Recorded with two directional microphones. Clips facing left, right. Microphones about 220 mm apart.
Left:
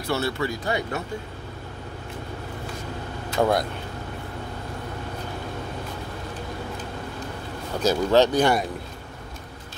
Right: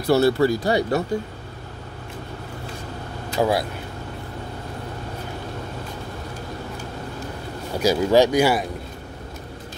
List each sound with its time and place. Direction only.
0.1 s speech: 35° right (ahead or behind)
3.3 s speech: 5° right (ahead or behind)
7.7 s speech: 10° right (ahead or behind)